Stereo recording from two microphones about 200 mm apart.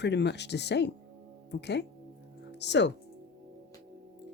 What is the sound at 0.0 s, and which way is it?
Speech, 55° left (ahead or behind).